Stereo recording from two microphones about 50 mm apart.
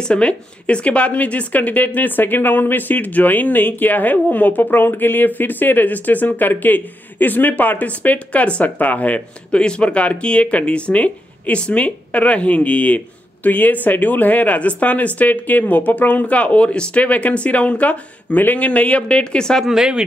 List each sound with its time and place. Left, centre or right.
0.1 s a woman's voice: left
19.6 s speech: centre